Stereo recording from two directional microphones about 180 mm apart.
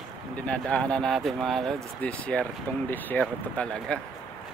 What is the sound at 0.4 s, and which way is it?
Speech, 5° left (ahead or behind).